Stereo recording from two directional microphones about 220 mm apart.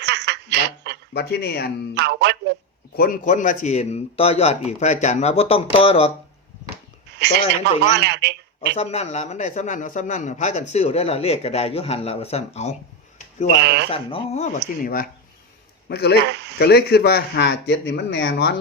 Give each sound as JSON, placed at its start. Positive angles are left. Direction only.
{"t": 0.0, "sound": "snicker", "side_deg": -50}
{"t": 1.1, "sound": "speech", "side_deg": 50}
{"t": 2.0, "sound": "music", "side_deg": -50}
{"t": 2.9, "sound": "a man's voice", "side_deg": 40}
{"t": 7.2, "sound": "speech", "side_deg": -50}
{"t": 8.7, "sound": "a man's voice", "side_deg": 30}
{"t": 13.1, "sound": "a sound", "side_deg": 30}
{"t": 13.9, "sound": "a man's voice", "side_deg": 25}
{"t": 15.9, "sound": "speech", "side_deg": 50}
{"t": 16.3, "sound": "speech", "side_deg": -50}
{"t": 16.6, "sound": "speech", "side_deg": 45}